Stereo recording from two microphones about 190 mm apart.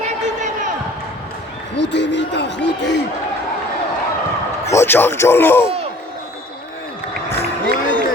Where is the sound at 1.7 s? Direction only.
65° left (ahead or behind).